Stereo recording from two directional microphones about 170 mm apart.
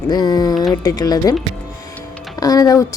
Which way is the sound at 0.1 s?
25° left (ahead or behind).